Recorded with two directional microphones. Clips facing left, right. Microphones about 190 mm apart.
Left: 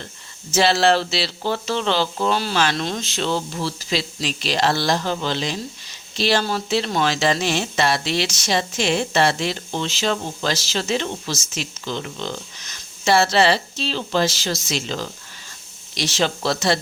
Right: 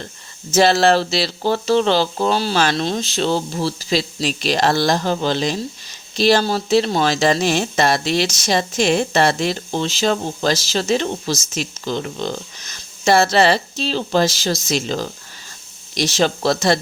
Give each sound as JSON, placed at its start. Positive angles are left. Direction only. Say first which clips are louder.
{"t": 0.5, "sound": "speech", "louder": "right 3 dB", "side_deg": -45}